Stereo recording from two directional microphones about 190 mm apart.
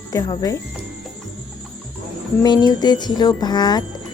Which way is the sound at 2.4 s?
20° left (ahead or behind).